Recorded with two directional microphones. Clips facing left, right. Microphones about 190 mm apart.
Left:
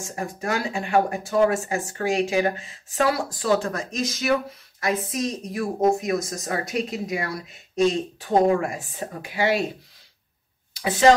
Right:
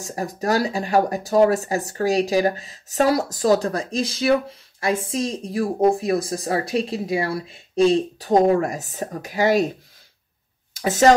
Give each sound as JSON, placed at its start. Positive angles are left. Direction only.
{"t": 0.0, "sound": "speech", "side_deg": -35}
{"t": 10.7, "sound": "speech", "side_deg": -45}